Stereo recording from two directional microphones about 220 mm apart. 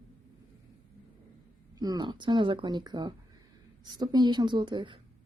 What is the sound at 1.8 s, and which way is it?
A woman's voice, 20° right (ahead or behind).